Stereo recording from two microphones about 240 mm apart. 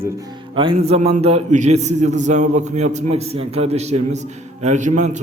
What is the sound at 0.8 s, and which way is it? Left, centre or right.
A man's voice, right.